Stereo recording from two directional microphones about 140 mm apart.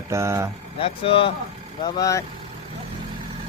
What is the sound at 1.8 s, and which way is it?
Speech, 25° left (ahead or behind).